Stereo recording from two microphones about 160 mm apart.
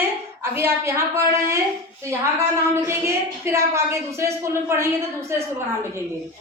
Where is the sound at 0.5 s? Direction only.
15° right (ahead or behind).